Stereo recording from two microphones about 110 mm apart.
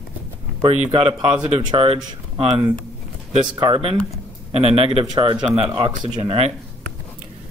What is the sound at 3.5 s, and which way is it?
Speech, 50° right (ahead or behind).